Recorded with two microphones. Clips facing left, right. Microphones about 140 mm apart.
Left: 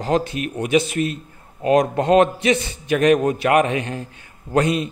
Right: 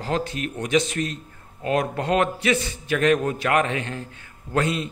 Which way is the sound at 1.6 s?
20° left (ahead or behind).